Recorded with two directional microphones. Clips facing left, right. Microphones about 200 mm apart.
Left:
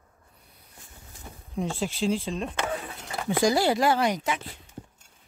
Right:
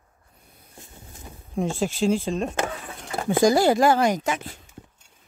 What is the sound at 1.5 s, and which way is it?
Speech, 45° right (ahead or behind).